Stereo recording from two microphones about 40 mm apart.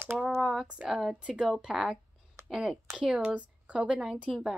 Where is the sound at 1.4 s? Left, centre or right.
Centre.